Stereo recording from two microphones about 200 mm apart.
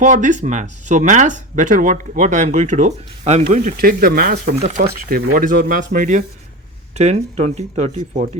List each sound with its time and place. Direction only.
0.0 s speech: 40° right (ahead or behind)